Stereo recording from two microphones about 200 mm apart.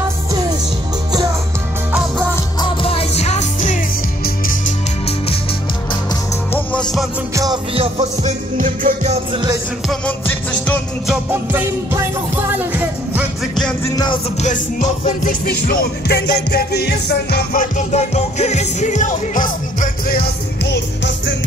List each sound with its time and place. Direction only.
2.3 s music: 25° left (ahead or behind); by 4.7 s 45° left (ahead or behind)
7.7 s music: 30° right (ahead or behind)
9.8 s music: 5° left (ahead or behind)
11.1 s music: 10° right (ahead or behind)
13.8 s music: 20° left (ahead or behind)
14.4 s music: 40° left (ahead or behind)
20.7 s music: 60° left (ahead or behind)